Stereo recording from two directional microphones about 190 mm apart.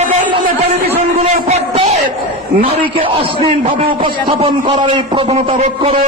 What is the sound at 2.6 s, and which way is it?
A man's voice, 30° right (ahead or behind).